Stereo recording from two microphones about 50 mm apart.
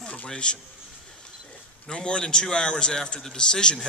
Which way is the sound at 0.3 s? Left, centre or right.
Centre.